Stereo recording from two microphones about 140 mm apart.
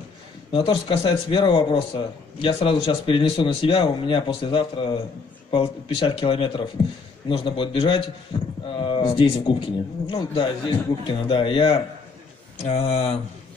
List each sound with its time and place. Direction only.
0.5 s a man's voice: 40° left (ahead or behind)